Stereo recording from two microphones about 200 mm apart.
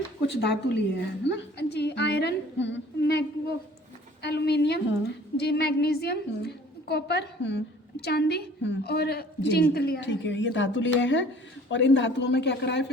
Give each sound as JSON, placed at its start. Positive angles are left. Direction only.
{"t": 0.3, "sound": "a woman's voice", "side_deg": 60}